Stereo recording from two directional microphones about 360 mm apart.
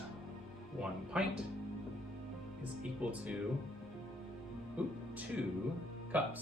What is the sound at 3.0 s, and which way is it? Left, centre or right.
Speech, centre.